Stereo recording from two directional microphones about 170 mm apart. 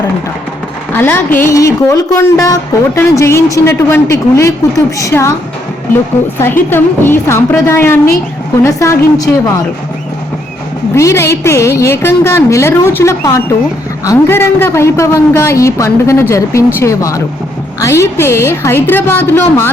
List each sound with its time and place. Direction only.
0.9 s a woman's voice: 10° left (ahead or behind)
6.4 s a woman's voice: 15° left (ahead or behind)
10.9 s a woman's voice: 15° left (ahead or behind)